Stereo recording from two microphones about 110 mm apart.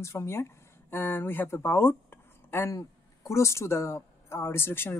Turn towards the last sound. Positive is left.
turn(degrees=20)  # may be behind; listen again after turning